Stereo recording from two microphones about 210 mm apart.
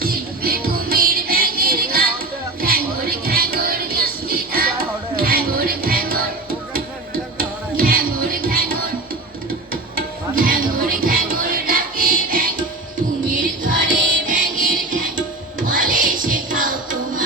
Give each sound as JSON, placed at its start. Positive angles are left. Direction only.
{"t": 0.0, "sound": "music", "side_deg": -45}
{"t": 7.3, "sound": "music", "side_deg": -45}
{"t": 9.9, "sound": "music", "side_deg": -45}